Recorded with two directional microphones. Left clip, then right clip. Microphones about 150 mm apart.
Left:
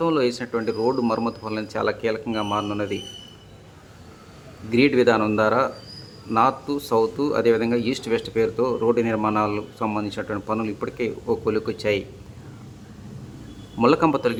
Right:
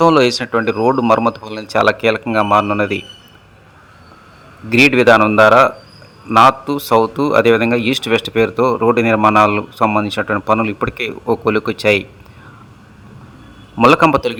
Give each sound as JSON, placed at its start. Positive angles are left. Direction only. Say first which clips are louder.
{"t": 0.0, "sound": "a man's voice", "louder": "right 11 dB", "side_deg": -40}
{"t": 4.7, "sound": "a man's voice", "louder": "right 9 dB", "side_deg": -30}
{"t": 13.7, "sound": "a man's voice", "louder": "right 9 dB", "side_deg": -30}